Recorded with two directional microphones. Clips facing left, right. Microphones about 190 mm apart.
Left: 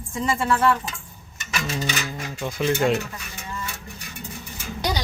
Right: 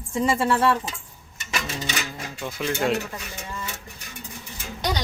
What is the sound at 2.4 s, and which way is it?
Speech, centre (ahead or behind).